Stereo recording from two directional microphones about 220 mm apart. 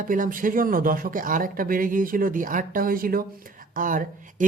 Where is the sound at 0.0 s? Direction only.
40° right (ahead or behind).